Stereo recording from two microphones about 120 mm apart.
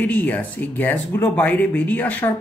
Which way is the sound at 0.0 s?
15° left (ahead or behind).